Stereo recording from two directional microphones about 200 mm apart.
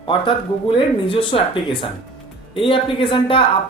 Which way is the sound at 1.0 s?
25° left (ahead or behind).